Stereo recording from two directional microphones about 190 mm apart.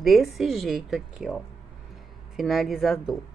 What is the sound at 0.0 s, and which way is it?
Speech, centre (ahead or behind).